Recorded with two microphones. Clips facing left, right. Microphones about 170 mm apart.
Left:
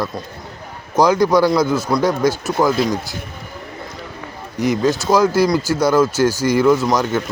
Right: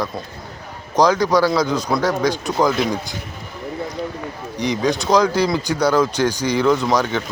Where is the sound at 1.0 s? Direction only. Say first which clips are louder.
Left 2 dB; 10° left (ahead or behind).